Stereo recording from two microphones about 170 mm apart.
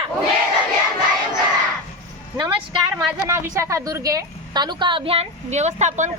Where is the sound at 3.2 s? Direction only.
15° right (ahead or behind).